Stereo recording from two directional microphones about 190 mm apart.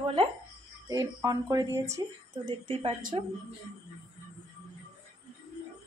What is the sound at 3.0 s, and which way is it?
Speech, 45° right (ahead or behind).